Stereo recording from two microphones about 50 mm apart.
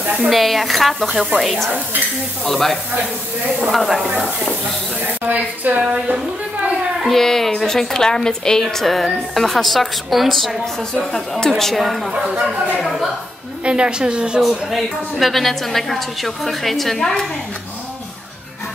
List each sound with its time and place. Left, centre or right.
0.0 s a woman's voice: right
0.3 s a woman's voice: centre
5.3 s a woman's voice: right
6.1 s a sound: centre
7.1 s a woman's voice: centre
8.6 s a woman's voice: centre
11.5 s a woman's voice: centre
13.7 s a woman's voice: centre
14.4 s a woman's voice: centre